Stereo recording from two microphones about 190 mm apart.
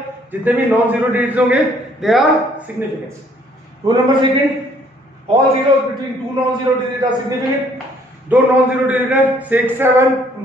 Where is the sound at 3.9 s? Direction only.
25° right (ahead or behind).